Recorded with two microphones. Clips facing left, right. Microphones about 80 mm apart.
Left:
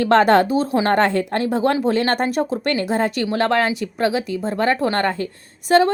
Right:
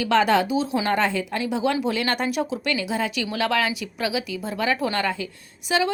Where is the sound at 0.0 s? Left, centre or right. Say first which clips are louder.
Left 5 dB; left.